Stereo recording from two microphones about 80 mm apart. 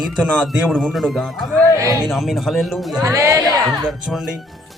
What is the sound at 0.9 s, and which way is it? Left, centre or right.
Speech, centre.